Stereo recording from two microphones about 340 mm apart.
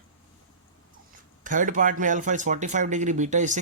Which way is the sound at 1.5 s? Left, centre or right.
Right.